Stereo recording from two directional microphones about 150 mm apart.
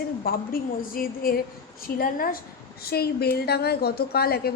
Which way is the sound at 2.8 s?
90° left.